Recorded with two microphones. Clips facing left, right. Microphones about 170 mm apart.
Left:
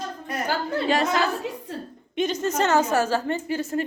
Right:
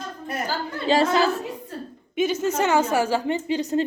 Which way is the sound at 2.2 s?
5° right (ahead or behind).